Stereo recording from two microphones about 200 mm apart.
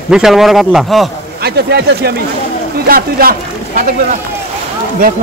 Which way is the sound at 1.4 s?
55° right (ahead or behind).